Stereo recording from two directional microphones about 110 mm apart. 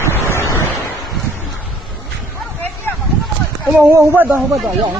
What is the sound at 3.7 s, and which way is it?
Speech, 20° right (ahead or behind).